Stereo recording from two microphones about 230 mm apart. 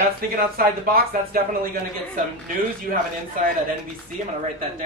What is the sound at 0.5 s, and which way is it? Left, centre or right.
Speech, right.